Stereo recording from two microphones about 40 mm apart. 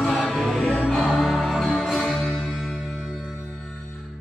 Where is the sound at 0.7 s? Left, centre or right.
Centre.